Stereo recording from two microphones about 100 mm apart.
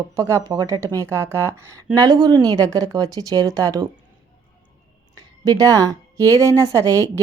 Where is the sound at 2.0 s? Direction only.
45° right (ahead or behind).